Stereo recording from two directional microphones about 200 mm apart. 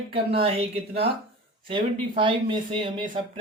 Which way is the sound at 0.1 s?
30° right (ahead or behind).